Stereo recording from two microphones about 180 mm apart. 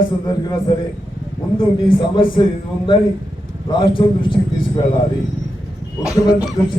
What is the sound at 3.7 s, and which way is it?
A man's voice, 30° left (ahead or behind).